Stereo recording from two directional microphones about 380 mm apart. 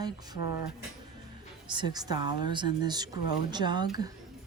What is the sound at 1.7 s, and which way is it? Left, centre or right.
Speech, centre.